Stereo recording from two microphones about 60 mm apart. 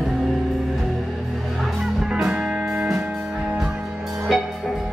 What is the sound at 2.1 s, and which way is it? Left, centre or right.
Music, centre.